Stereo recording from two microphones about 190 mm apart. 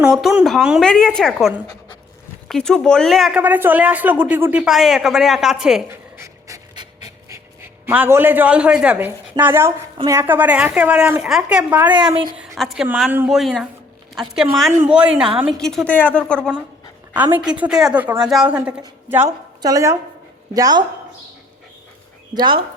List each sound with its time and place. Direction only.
0.0 s a woman's voice: centre (ahead or behind)
1.6 s dog: 20° left (ahead or behind)
2.5 s a woman's voice: 5° left (ahead or behind)
6.1 s pant: 15° right (ahead or behind)
10.0 s a woman's voice: 15° right (ahead or behind); by 16.5 s 5° left (ahead or behind)
17.3 s a woman's voice: 5° right (ahead or behind)
22.4 s a woman's voice: 25° right (ahead or behind)